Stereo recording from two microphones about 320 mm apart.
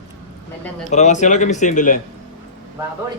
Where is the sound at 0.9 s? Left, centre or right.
Left.